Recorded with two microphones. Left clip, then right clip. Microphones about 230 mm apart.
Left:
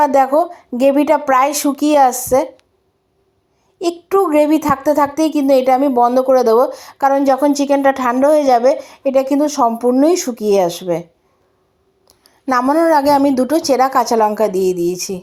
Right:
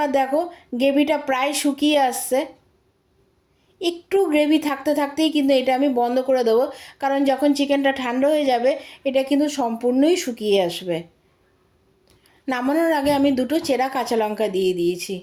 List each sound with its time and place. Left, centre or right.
0.0 s a woman's voice: centre
3.8 s a woman's voice: centre
12.7 s a woman's voice: centre
13.3 s speech: centre
13.8 s a woman's voice: centre